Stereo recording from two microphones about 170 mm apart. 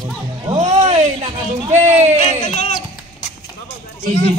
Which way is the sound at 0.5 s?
40° right (ahead or behind).